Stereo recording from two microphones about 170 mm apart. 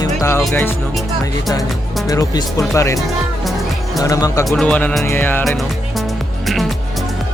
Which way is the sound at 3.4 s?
Centre (ahead or behind).